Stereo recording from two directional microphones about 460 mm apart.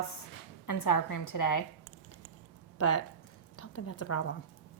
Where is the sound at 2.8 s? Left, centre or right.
Left.